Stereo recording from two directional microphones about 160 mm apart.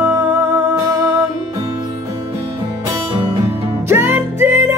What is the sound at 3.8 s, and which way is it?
Music, 15° right (ahead or behind).